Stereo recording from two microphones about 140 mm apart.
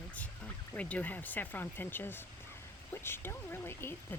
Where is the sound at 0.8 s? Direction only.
10° left (ahead or behind).